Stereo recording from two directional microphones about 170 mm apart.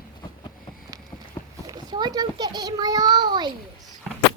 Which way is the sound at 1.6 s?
25° right (ahead or behind).